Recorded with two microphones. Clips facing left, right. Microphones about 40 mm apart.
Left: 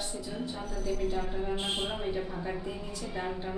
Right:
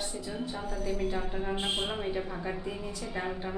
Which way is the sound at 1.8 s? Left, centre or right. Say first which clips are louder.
Even; centre.